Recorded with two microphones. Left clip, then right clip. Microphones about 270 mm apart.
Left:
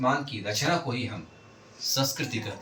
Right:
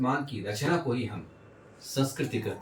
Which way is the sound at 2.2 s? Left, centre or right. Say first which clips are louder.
Even; centre.